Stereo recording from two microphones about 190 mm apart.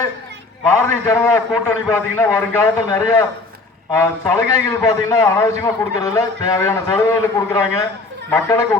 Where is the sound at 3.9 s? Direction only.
15° left (ahead or behind).